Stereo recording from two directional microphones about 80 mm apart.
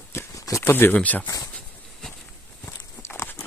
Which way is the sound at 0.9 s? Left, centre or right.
Centre.